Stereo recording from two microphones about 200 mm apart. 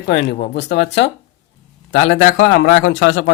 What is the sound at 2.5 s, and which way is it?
Speech, 80° left.